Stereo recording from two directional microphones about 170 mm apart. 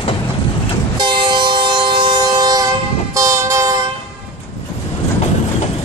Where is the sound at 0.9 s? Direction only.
30° right (ahead or behind).